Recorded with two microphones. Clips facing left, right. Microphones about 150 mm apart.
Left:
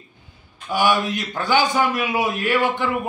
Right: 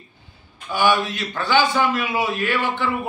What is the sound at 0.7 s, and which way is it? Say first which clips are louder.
A man's voice: even; 15° left (ahead or behind).